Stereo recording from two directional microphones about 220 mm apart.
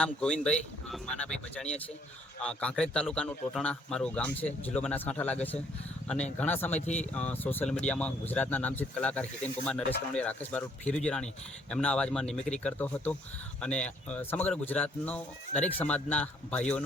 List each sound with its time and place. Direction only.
0.0 s speech: 5° left (ahead or behind)
6.7 s speech: 30° left (ahead or behind)
7.1 s speech: 5° left (ahead or behind)